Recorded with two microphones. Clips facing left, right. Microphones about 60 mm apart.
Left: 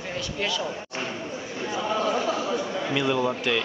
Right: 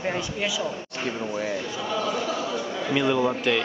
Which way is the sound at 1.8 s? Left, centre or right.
Centre.